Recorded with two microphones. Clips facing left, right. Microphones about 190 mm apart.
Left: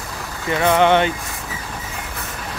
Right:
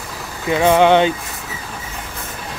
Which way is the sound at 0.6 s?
15° right (ahead or behind).